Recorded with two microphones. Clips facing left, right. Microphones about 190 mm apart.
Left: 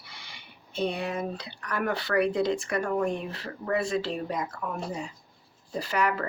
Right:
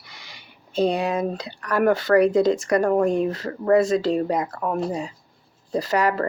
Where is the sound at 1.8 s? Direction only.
45° right (ahead or behind).